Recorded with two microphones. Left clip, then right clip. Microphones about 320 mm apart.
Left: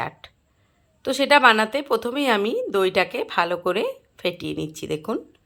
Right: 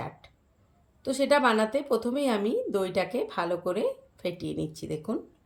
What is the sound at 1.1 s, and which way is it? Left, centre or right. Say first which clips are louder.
Speech: left 8 dB; centre.